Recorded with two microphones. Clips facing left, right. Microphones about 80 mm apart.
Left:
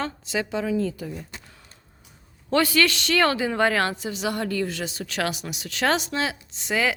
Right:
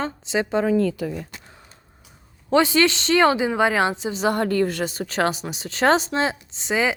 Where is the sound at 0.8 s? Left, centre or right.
Right.